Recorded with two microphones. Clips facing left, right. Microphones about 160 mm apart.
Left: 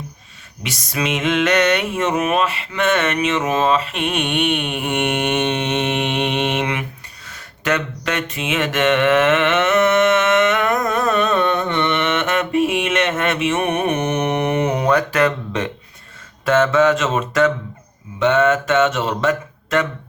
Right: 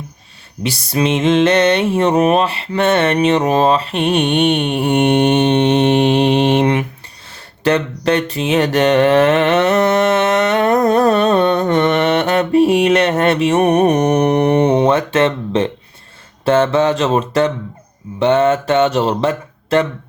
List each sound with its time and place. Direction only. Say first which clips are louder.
0.6 s mantra: right 7 dB; 30° right (ahead or behind)